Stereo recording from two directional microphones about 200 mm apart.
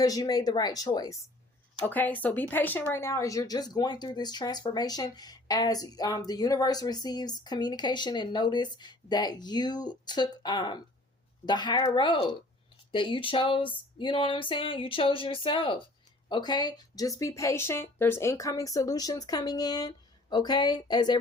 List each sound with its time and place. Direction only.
0.0 s a woman's voice: 20° left (ahead or behind)